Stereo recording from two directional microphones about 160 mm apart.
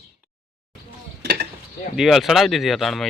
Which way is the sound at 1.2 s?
85° right.